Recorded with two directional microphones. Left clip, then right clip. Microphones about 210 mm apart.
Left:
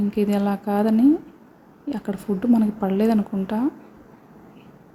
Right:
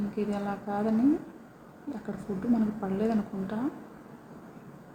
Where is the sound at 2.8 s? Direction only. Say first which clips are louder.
Left 9 dB; 35° left (ahead or behind).